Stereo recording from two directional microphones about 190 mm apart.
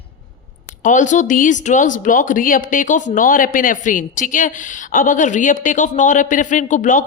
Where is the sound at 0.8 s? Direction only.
40° left (ahead or behind).